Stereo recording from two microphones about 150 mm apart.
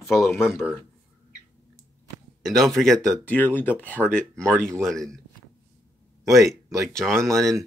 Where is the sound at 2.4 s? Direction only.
Centre (ahead or behind).